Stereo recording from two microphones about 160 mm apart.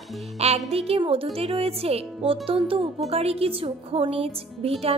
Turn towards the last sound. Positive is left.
turn(degrees=-40)  # may be behind; listen again after turning